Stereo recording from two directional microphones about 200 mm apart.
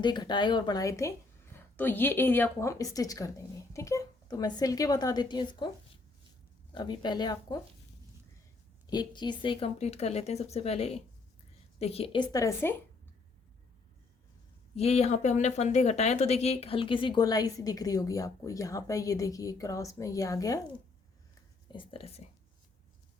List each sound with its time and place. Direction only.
0.0 s speech: 20° left (ahead or behind)
6.7 s speech: 20° left (ahead or behind)
8.9 s speech: 20° left (ahead or behind)
14.8 s speech: 30° left (ahead or behind); by 20.6 s 15° left (ahead or behind)
21.7 s speech: 25° left (ahead or behind)